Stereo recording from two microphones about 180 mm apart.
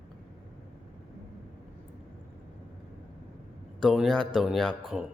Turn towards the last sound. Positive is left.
turn(degrees=0)  # may be behind; listen again after turning